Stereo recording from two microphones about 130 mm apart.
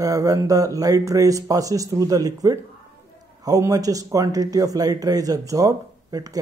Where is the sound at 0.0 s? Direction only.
25° right (ahead or behind).